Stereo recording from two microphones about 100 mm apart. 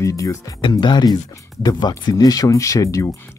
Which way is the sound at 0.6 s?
50° left (ahead or behind).